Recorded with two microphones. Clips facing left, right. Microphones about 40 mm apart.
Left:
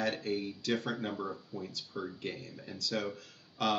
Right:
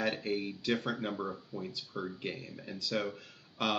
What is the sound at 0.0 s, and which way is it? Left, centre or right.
Speech, centre.